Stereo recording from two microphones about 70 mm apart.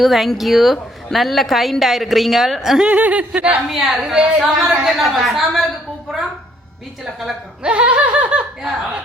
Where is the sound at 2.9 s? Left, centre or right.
Centre.